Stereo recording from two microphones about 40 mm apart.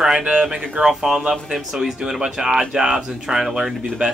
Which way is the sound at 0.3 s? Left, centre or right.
Centre.